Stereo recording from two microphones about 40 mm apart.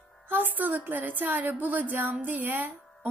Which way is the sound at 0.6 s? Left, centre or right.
Right.